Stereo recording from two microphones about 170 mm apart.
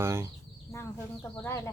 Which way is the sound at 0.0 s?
15° right (ahead or behind).